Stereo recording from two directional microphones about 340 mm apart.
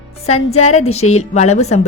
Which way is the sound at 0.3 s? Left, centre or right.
Centre.